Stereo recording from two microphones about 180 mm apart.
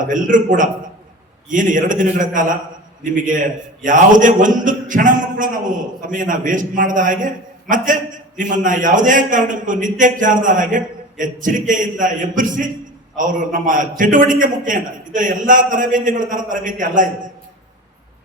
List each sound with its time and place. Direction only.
0.1 s a man's voice: 45° right (ahead or behind)